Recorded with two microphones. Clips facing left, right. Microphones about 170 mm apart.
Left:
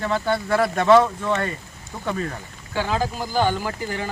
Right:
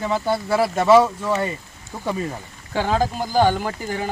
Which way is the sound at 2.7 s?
40° right (ahead or behind).